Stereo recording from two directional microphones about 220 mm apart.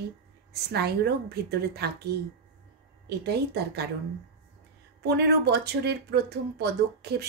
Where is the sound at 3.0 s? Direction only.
50° right (ahead or behind).